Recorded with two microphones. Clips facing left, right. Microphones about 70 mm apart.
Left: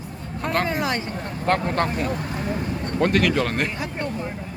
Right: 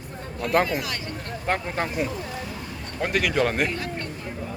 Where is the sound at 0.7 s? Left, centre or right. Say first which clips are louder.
Left 5 dB; left.